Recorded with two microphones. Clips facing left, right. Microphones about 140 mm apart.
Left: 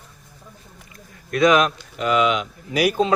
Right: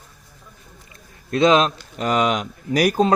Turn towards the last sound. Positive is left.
turn(degrees=-45)  # may be behind; listen again after turning